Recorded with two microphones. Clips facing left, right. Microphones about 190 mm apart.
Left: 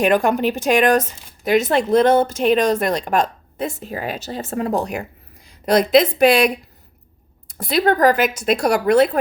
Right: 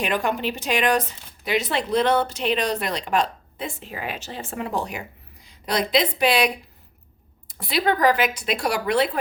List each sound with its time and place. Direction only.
0.0 s speech: 45° left (ahead or behind)